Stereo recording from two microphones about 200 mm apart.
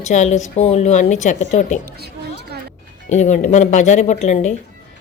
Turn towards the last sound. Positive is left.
turn(degrees=35)  # may be behind; listen again after turning